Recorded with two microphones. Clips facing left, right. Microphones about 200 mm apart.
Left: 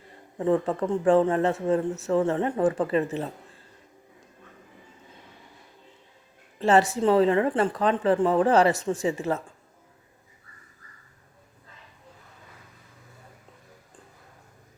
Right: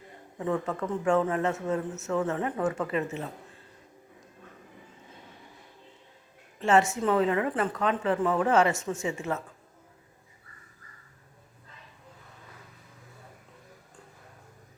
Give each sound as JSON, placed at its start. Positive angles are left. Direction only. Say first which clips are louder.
{"t": 0.3, "sound": "speech", "louder": "left 6 dB", "side_deg": 30}
{"t": 6.6, "sound": "speech", "louder": "left 3 dB", "side_deg": 35}